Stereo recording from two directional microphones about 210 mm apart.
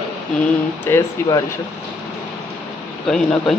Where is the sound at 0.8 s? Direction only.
15° left (ahead or behind).